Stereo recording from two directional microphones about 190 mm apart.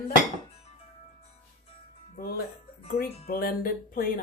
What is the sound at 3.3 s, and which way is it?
Speech, 50° left (ahead or behind).